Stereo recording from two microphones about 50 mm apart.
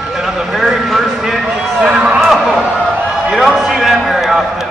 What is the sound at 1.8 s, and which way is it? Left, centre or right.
Speech, right.